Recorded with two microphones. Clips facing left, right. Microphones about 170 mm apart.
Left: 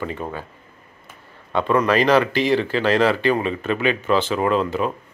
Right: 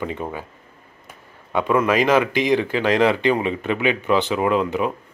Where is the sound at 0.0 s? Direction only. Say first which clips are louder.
Right 1 dB; 15° right (ahead or behind).